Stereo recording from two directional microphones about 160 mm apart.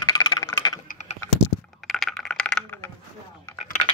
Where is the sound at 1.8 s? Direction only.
Centre (ahead or behind).